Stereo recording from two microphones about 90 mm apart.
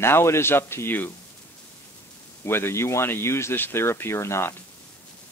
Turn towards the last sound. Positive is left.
turn(degrees=30)  # may be behind; listen again after turning